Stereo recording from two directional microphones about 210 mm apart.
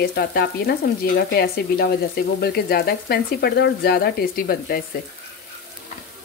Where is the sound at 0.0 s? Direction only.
50° left (ahead or behind).